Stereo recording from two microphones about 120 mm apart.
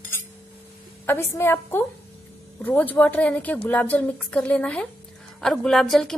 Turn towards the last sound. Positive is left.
turn(degrees=5)  # may be behind; listen again after turning